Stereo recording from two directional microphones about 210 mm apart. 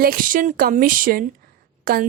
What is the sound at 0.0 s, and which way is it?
A woman's voice, 45° right (ahead or behind).